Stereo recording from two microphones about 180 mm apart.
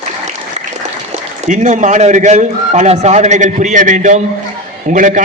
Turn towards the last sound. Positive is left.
turn(degrees=-45)  # may be behind; listen again after turning